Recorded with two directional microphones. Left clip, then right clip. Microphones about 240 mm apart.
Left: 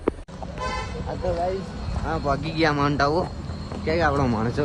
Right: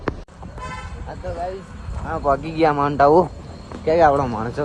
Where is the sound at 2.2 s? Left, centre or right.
Centre.